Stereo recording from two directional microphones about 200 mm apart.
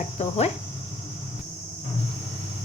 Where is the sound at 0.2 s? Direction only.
30° left (ahead or behind).